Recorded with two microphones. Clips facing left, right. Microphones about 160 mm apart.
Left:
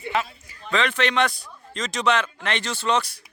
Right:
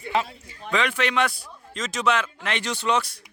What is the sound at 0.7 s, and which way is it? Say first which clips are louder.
A man's voice: left 1 dB; 10° right (ahead or behind).